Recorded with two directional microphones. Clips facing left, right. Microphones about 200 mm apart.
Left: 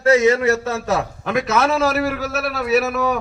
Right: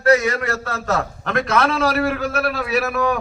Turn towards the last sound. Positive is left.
turn(degrees=5)  # may be behind; listen again after turning